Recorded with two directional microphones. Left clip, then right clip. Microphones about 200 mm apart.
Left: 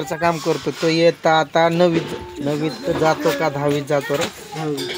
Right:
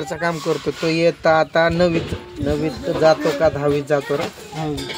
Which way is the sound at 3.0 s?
20° left (ahead or behind).